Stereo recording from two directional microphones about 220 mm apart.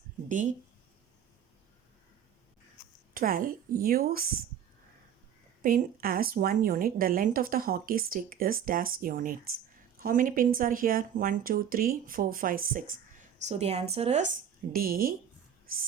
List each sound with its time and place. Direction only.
3.2 s a woman's voice: 40° right (ahead or behind)
5.6 s a woman's voice: 40° right (ahead or behind)
14.7 s a woman's voice: 40° right (ahead or behind)